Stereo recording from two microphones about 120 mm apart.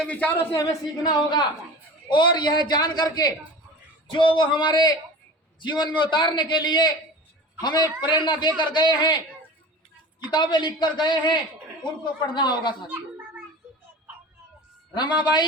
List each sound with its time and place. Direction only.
0.0 s a man's voice: 10° left (ahead or behind)
0.6 s a man's voice: 30° left (ahead or behind)
10.2 s a man's voice: 40° left (ahead or behind)
12.9 s a sound: 15° right (ahead or behind)
14.9 s a man's voice: 40° left (ahead or behind)